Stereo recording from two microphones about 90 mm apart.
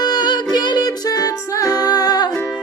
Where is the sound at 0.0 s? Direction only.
50° left (ahead or behind).